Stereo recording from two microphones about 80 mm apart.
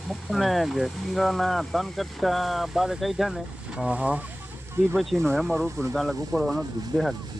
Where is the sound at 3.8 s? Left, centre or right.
Centre.